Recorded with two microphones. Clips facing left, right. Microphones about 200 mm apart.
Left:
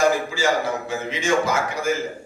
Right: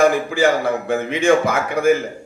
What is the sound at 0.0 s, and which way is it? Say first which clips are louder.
A man's voice: right 5 dB; 55° right (ahead or behind).